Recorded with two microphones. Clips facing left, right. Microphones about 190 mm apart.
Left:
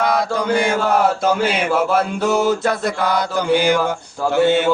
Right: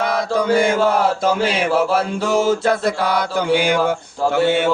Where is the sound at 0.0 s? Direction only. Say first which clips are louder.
Even; 55° right (ahead or behind).